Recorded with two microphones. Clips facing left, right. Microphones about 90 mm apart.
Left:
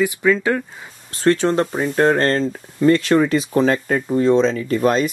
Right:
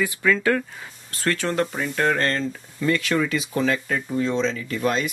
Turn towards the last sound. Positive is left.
turn(degrees=45)  # may be behind; listen again after turning